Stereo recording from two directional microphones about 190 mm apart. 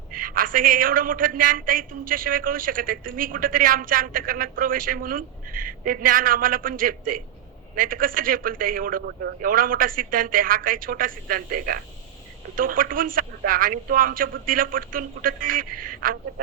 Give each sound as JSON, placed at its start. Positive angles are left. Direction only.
{"t": 0.1, "sound": "a man's voice", "side_deg": -50}